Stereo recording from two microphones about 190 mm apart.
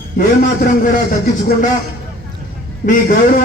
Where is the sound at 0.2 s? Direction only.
45° left (ahead or behind).